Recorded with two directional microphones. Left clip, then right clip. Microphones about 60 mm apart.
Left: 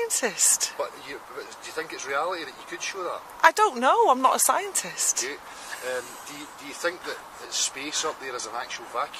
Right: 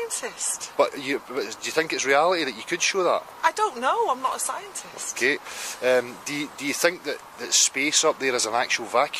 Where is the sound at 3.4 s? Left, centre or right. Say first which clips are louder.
Left 5 dB; left.